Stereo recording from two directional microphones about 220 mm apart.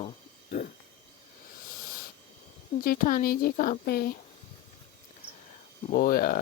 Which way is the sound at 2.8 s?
40° left (ahead or behind).